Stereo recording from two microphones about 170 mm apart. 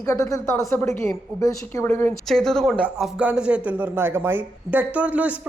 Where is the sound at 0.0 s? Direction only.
20° left (ahead or behind).